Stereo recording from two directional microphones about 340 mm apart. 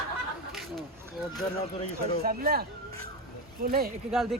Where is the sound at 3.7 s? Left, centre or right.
Right.